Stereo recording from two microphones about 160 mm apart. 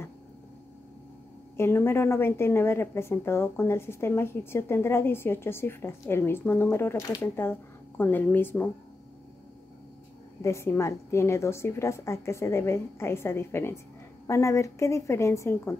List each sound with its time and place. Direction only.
1.6 s a woman's voice: 15° left (ahead or behind)
10.4 s a woman's voice: 15° left (ahead or behind)